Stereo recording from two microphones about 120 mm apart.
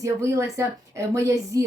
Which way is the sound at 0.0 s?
25° right (ahead or behind).